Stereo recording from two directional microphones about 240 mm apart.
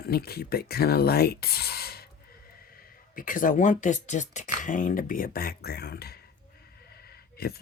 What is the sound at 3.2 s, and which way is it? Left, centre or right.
Speech, left.